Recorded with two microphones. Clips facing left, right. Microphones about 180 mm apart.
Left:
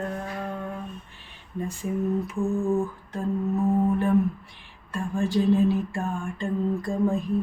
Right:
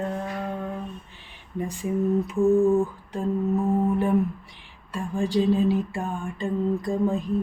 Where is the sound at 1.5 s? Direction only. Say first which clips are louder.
Right 2 dB; 15° right (ahead or behind).